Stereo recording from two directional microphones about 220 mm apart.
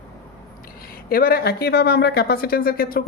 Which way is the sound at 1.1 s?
40° left (ahead or behind).